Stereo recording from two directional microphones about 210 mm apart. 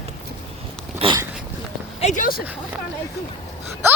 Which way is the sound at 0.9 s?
25° right (ahead or behind).